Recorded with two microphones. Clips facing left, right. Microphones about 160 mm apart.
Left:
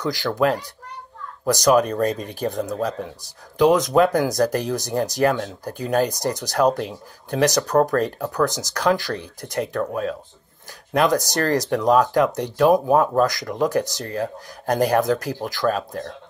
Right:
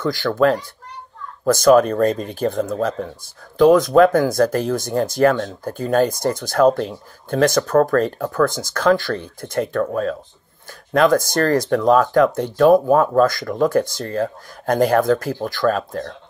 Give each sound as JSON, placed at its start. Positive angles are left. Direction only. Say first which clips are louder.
{"t": 0.0, "sound": "speech", "louder": "right 4 dB", "side_deg": 15}